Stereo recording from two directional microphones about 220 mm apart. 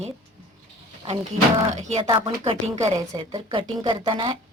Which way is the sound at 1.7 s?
30° right (ahead or behind).